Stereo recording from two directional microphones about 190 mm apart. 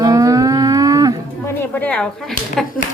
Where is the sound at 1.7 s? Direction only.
5° left (ahead or behind).